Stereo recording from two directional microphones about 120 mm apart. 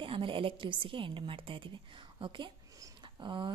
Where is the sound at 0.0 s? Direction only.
45° right (ahead or behind).